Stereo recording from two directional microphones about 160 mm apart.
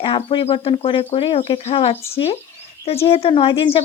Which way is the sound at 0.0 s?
30° left (ahead or behind).